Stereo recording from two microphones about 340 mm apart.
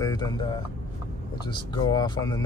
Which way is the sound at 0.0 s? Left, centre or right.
Centre.